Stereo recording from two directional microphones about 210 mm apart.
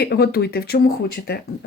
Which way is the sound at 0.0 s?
50° left (ahead or behind).